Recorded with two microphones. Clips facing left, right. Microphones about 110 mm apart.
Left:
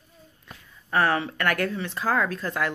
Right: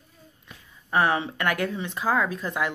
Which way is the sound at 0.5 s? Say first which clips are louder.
Left 3 dB; 40° left (ahead or behind).